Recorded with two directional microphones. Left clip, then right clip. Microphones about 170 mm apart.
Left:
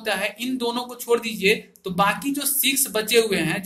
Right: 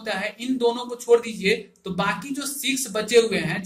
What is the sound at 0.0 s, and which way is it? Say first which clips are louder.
Speech: left 3 dB; 45° left (ahead or behind).